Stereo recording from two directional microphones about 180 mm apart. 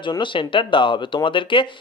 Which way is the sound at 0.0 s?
25° left (ahead or behind).